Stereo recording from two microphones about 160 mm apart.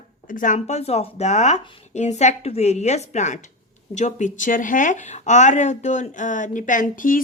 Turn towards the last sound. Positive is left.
turn(degrees=60)  # may be behind; listen again after turning